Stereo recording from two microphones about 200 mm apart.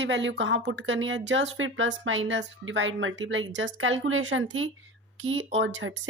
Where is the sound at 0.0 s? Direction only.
65° right (ahead or behind).